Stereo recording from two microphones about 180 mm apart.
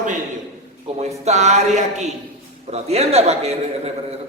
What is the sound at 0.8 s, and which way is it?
Speech, 40° right (ahead or behind).